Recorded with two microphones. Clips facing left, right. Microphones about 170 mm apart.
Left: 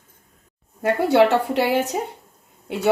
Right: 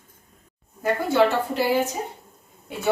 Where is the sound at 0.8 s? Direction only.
75° left (ahead or behind).